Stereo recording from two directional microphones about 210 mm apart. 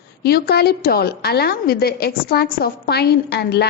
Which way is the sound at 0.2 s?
50° left (ahead or behind).